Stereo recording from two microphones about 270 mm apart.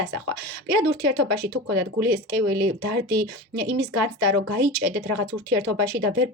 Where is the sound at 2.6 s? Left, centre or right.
Right.